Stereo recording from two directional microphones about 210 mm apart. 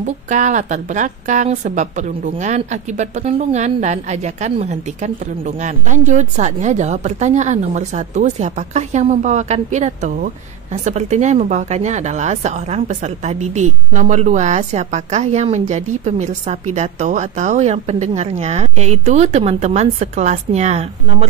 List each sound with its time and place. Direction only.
0.0 s a woman's voice: 35° right (ahead or behind)